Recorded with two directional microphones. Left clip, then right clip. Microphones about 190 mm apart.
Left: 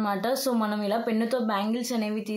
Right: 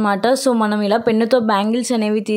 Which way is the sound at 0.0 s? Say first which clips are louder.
Right 11 dB; 45° right (ahead or behind).